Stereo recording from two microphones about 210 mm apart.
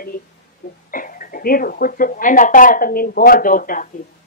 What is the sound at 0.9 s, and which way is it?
Speech, 40° left (ahead or behind).